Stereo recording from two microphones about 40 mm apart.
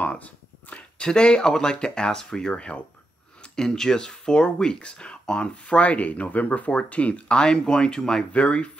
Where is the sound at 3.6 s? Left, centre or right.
Centre; by 7.2 s left.